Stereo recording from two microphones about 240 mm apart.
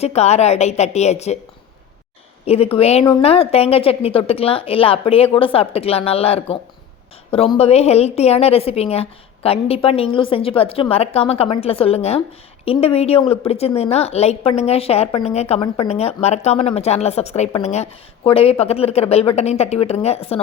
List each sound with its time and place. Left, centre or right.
0.0 s a woman's voice: left
2.5 s a woman's voice: left